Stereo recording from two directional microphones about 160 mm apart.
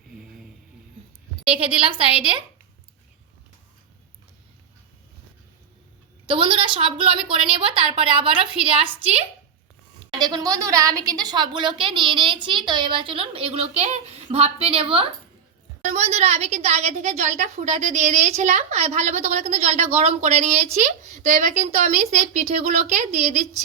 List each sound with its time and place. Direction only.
1.5 s a woman's voice: 35° right (ahead or behind)
6.2 s a woman's voice: 35° right (ahead or behind)
10.2 s a woman's voice: 25° right (ahead or behind); by 23.5 s 45° right (ahead or behind)